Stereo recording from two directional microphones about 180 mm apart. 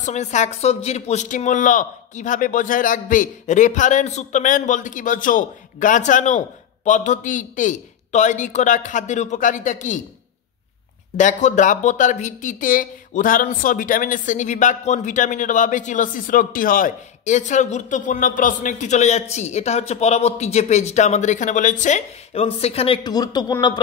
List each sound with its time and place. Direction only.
0.0 s speech: 40° left (ahead or behind)
11.1 s speech: 40° left (ahead or behind)
23.0 s speech: 20° left (ahead or behind)